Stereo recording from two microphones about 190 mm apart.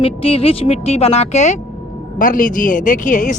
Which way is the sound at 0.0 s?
30° left (ahead or behind).